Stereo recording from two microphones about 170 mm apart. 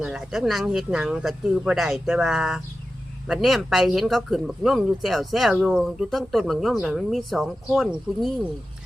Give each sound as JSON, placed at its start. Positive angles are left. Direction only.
{"t": 0.0, "sound": "speech", "side_deg": -5}